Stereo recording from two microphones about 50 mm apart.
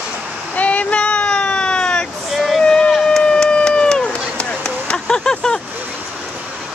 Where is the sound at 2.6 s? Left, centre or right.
Centre.